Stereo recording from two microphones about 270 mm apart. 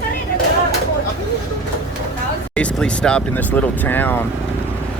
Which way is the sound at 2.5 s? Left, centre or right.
Centre.